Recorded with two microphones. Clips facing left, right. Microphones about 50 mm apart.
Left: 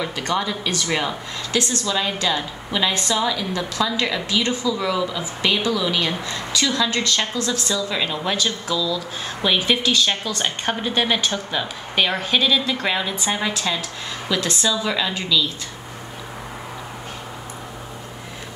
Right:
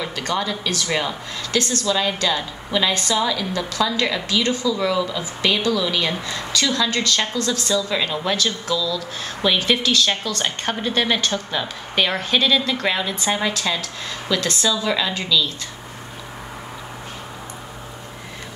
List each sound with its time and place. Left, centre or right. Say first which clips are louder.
0.3 s a woman's voice: even; centre
6.3 s a woman's voice: even; centre
7.6 s a woman's voice: right 2 dB; centre